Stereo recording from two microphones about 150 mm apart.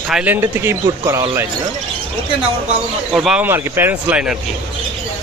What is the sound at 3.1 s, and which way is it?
Speech, centre (ahead or behind).